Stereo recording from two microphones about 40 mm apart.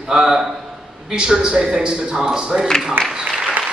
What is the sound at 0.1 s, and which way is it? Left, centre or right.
A man's voice, centre.